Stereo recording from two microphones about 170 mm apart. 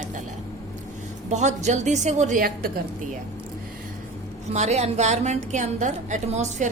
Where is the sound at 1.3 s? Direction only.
45° right (ahead or behind).